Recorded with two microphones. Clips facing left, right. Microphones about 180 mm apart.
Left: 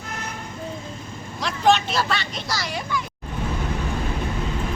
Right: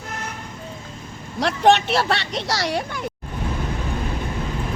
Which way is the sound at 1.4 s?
65° right (ahead or behind).